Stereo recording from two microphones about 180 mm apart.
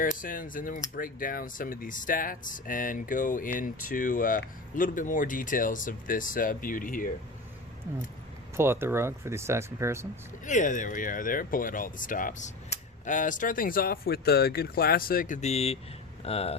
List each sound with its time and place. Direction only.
0.0 s speech: 50° left (ahead or behind)
8.5 s speech: 15° right (ahead or behind)
10.4 s speech: 45° left (ahead or behind)